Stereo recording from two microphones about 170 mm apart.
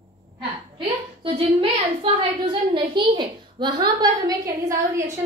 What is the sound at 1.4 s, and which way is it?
A woman's voice, 30° right (ahead or behind).